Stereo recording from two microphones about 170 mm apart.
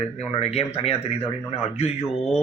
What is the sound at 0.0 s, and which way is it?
Speech, 35° left (ahead or behind).